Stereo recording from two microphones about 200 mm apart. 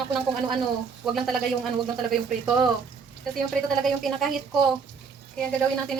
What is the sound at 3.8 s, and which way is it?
Speech, centre (ahead or behind).